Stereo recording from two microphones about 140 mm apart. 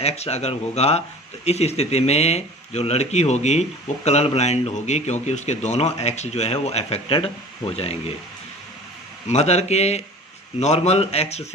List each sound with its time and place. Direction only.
0.0 s speech: 50° left (ahead or behind)
9.2 s speech: 50° left (ahead or behind)